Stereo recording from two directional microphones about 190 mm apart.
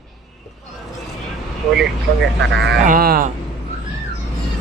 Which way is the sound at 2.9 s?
50° right (ahead or behind).